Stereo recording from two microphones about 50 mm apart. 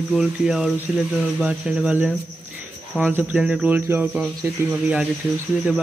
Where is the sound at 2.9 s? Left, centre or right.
Right.